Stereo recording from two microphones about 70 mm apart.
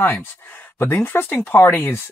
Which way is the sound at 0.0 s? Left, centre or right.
Left.